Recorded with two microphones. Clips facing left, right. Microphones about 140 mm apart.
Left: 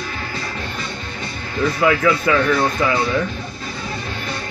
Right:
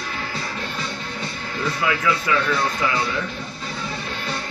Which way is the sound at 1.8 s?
55° left (ahead or behind).